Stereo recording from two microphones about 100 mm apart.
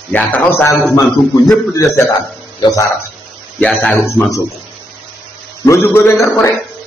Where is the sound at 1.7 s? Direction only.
30° left (ahead or behind).